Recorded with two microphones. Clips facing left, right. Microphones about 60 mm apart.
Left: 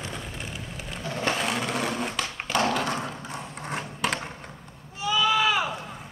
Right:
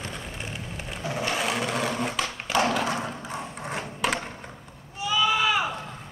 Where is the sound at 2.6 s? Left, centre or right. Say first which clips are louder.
Right 1 dB; centre.